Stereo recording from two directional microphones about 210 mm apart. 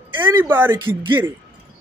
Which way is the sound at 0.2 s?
10° right (ahead or behind).